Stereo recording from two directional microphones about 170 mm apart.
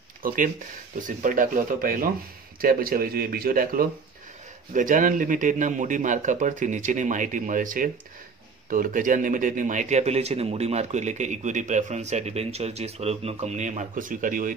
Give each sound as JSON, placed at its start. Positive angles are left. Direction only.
{"t": 0.2, "sound": "speech", "side_deg": -55}